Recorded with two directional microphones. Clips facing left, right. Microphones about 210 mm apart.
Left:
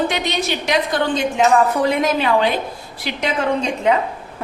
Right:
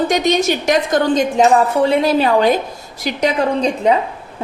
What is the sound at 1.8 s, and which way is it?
A woman's voice, 30° right (ahead or behind).